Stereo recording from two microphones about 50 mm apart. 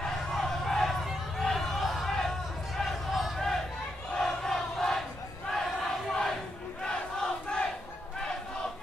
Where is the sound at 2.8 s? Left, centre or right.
Centre.